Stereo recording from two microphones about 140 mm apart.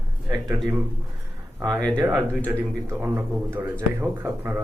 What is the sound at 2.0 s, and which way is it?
Speech, 15° right (ahead or behind).